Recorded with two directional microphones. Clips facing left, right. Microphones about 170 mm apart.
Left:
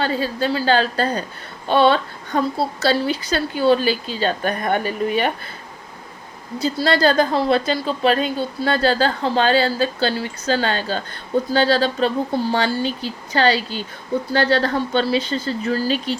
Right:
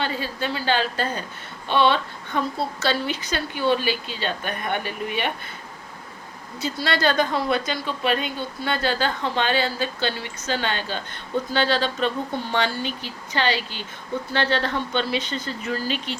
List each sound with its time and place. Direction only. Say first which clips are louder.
0.0 s a woman's voice: left 6 dB; 40° left (ahead or behind)
6.6 s a woman's voice: left 6 dB; 35° left (ahead or behind)